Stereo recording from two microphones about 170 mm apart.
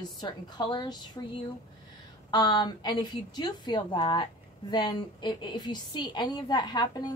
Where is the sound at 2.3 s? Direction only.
25° left (ahead or behind).